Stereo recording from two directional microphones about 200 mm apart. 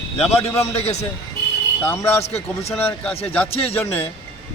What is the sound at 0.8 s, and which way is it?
Speech, 35° left (ahead or behind).